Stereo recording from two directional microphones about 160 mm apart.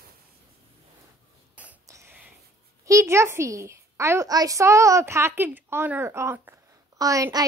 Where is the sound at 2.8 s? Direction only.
20° right (ahead or behind).